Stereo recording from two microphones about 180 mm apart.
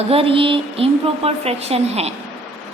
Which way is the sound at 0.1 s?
30° right (ahead or behind).